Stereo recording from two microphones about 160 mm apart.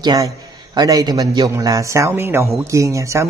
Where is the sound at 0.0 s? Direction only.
25° right (ahead or behind).